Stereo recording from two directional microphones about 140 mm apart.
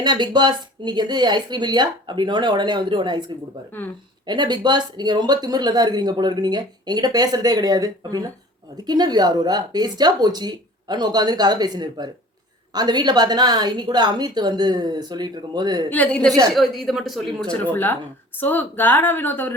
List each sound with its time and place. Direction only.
0.0 s speech: 30° right (ahead or behind)
3.7 s a woman's voice: 15° left (ahead or behind)
4.3 s speech: 30° right (ahead or behind)
15.9 s a woman's voice: 10° left (ahead or behind)
17.5 s a woman's voice: 10° left (ahead or behind)